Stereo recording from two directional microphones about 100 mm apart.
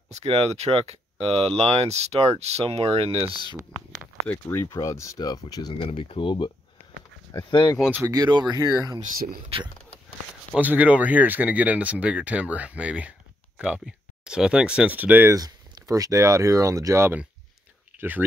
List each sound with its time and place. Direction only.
0.1 s speech: 90° right
4.3 s speech: 25° left (ahead or behind); by 5.8 s 40° left (ahead or behind)
5.8 s speech: 65° left (ahead or behind)
8.0 s speech: 40° right (ahead or behind)
9.5 s speech: 75° right (ahead or behind)
10.6 s speech: 15° right (ahead or behind)
15.3 s speech: 40° right (ahead or behind)
17.9 s speech: 20° right (ahead or behind)